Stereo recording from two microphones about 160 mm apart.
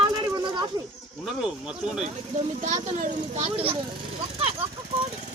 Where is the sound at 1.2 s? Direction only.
5° right (ahead or behind).